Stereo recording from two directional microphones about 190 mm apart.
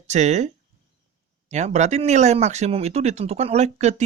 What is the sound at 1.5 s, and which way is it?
Speech, 40° right (ahead or behind).